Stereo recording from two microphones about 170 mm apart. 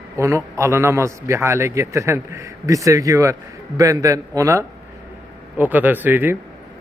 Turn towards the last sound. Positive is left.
turn(degrees=-10)  # may be behind; listen again after turning